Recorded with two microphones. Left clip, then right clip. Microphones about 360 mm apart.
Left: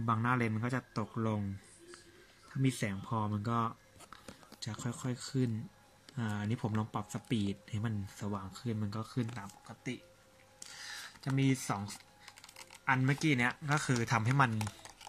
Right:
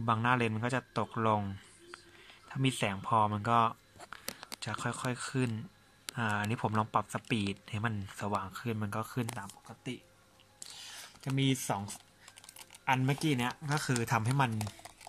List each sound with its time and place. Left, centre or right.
0.0 s speech: centre
2.9 s speech: centre
10.8 s computer keyboard: centre
12.8 s speech: centre